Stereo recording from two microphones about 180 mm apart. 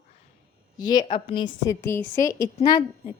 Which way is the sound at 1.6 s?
15° left (ahead or behind).